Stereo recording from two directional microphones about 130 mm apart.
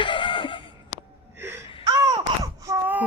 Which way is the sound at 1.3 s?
20° right (ahead or behind).